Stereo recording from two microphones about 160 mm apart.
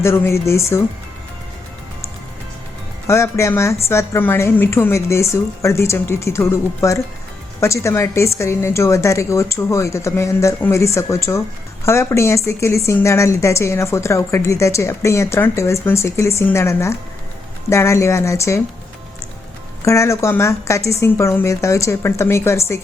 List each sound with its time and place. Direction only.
0.0 s a woman's voice: 15° left (ahead or behind)
3.1 s a woman's voice: 15° left (ahead or behind)
19.8 s a woman's voice: 20° left (ahead or behind)